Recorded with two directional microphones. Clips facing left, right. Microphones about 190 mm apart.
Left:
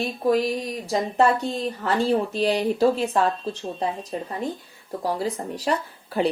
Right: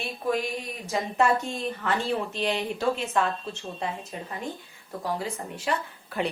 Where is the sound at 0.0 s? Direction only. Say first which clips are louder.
Left 7 dB; 35° left (ahead or behind).